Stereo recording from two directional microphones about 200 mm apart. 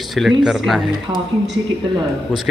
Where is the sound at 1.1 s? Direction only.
20° right (ahead or behind).